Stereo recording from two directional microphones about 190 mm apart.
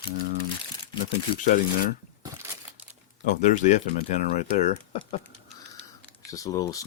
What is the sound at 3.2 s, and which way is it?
Speech, 40° left (ahead or behind).